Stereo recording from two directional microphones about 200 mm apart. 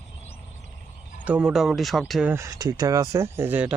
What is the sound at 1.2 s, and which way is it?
Speech, 5° right (ahead or behind).